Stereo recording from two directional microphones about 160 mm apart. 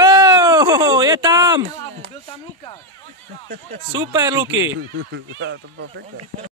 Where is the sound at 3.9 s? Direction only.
25° right (ahead or behind).